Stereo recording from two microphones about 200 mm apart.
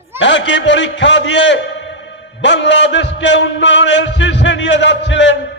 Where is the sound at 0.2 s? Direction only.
65° left (ahead or behind).